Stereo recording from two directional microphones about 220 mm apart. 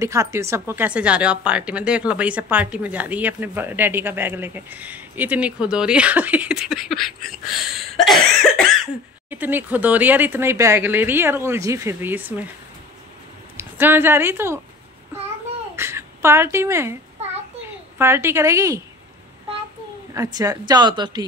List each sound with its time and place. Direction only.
0.0 s a woman's voice: 15° right (ahead or behind)
13.6 s speech: 10° right (ahead or behind)
15.7 s a woman's voice: 10° right (ahead or behind)
20.2 s a woman's voice: 15° right (ahead or behind)